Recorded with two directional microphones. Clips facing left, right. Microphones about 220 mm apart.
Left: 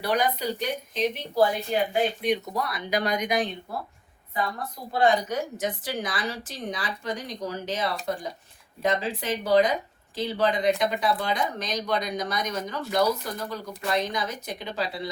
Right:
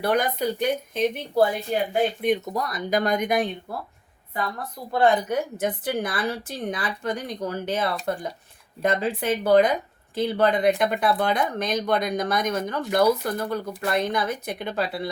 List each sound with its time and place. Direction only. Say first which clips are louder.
0.0 s speech: right 3 dB; 50° right (ahead or behind)
4.9 s speech: right 2 dB; 55° right (ahead or behind)